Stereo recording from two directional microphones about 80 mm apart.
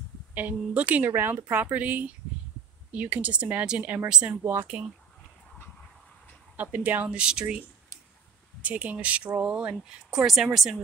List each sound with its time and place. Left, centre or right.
0.3 s speech: centre
4.7 s speech: right
6.5 s speech: right
8.6 s speech: centre